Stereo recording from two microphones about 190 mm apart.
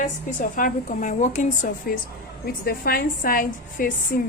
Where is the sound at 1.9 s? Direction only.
50° left (ahead or behind).